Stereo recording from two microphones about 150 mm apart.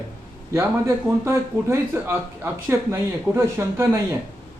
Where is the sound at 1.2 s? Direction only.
20° right (ahead or behind).